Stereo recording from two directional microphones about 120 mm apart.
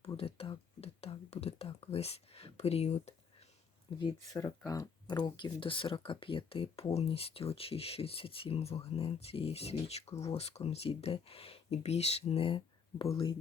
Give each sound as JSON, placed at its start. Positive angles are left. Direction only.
{"t": 0.2, "sound": "speech", "side_deg": 50}
{"t": 4.3, "sound": "speech", "side_deg": 30}